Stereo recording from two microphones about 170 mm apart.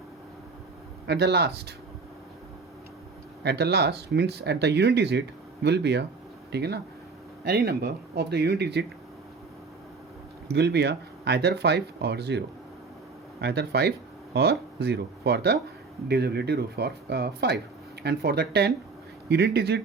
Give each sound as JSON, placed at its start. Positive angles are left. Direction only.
{"t": 1.0, "sound": "speech", "side_deg": -80}
{"t": 3.4, "sound": "speech", "side_deg": -75}
{"t": 10.5, "sound": "speech", "side_deg": -80}